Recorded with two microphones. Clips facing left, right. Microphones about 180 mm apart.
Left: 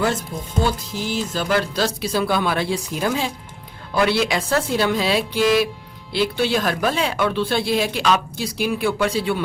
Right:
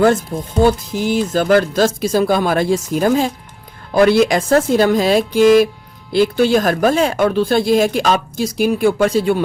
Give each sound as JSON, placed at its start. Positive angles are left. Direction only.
{"t": 0.6, "sound": "speech", "side_deg": -50}